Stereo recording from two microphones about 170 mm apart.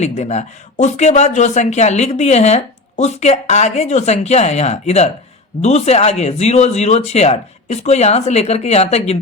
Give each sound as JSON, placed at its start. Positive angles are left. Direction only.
{"t": 0.0, "sound": "a man's voice", "side_deg": 40}